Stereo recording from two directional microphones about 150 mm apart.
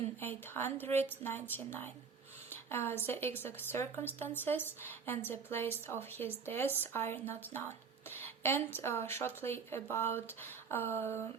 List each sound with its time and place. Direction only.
0.2 s a woman's voice: 15° left (ahead or behind)